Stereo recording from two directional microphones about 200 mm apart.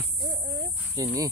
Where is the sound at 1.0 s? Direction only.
20° right (ahead or behind).